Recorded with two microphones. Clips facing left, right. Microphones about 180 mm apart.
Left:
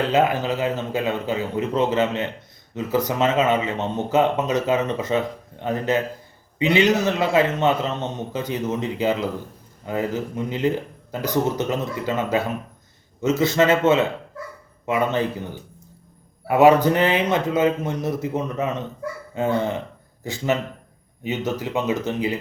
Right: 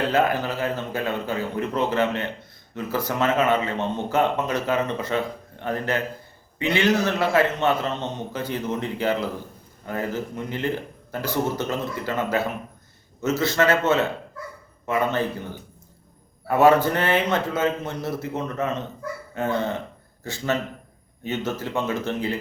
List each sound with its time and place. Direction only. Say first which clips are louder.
0.1 s a man's voice: left 2 dB; 20° left (ahead or behind)
13.4 s a man's voice: left 3 dB; 20° left (ahead or behind)
16.5 s a man's voice: left 2 dB; 15° left (ahead or behind)